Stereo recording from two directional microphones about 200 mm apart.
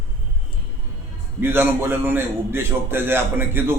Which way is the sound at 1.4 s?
10° right (ahead or behind).